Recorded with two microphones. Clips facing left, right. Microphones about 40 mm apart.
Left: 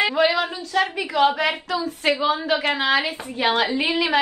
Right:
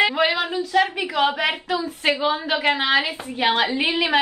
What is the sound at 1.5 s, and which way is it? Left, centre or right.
Speech, right.